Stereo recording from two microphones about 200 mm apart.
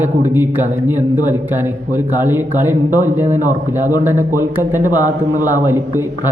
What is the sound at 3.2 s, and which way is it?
Speech, 35° right (ahead or behind).